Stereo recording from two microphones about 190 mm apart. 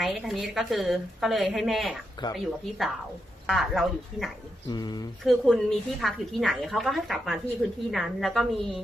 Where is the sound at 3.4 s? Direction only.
Centre (ahead or behind).